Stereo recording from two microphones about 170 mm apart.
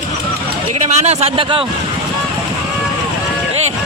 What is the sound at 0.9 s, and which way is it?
Speech, 40° right (ahead or behind).